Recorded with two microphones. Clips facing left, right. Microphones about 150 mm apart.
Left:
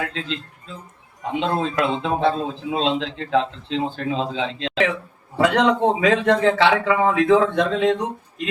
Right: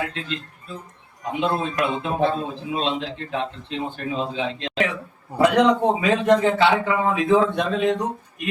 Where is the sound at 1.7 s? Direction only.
90° left.